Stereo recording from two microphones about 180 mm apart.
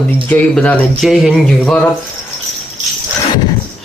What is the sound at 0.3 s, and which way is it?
A man's voice, 10° left (ahead or behind).